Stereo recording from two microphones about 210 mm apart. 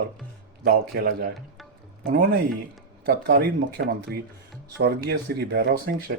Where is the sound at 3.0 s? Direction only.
45° right (ahead or behind).